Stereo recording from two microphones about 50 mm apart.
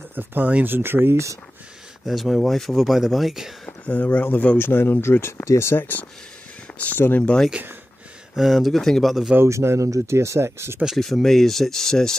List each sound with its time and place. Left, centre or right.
0.1 s speech: right
0.7 s speech: right
2.0 s speech: centre
2.7 s speech: centre
3.6 s a sound: left
4.0 s speech: left
5.8 s speech: left
8.4 s speech: centre
9.4 s speech: right
11.0 s speech: centre